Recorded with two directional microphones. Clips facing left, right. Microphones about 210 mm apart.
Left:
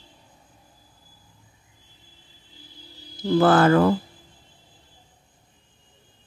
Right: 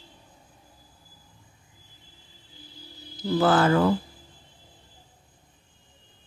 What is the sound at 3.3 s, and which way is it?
Speech, 55° left (ahead or behind).